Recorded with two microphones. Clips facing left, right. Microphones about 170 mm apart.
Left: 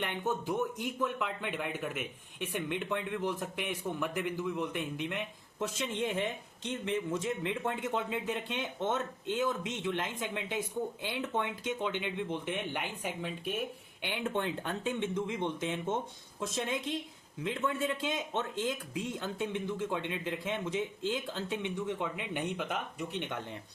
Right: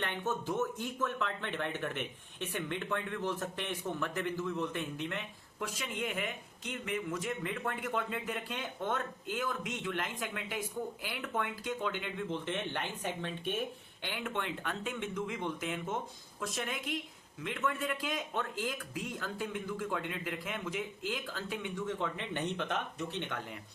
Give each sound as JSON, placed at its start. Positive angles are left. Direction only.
{"t": 0.0, "sound": "speech", "side_deg": 15}
{"t": 14.0, "sound": "speech", "side_deg": 20}
{"t": 14.3, "sound": "speech", "side_deg": 30}